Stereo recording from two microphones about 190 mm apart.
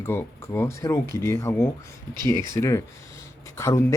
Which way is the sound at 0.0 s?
10° left (ahead or behind).